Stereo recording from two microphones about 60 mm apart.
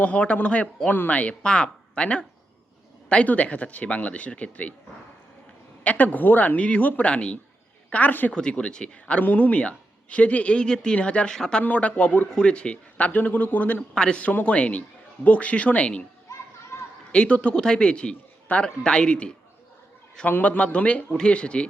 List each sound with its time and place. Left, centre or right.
0.0 s speech: left
5.8 s a woman's voice: left
8.3 s speech: centre
13.1 s speech: left
13.9 s speech: centre
17.1 s speech: centre
20.4 s speech: left